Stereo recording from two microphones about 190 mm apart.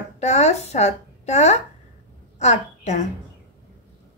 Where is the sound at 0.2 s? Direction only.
35° left (ahead or behind).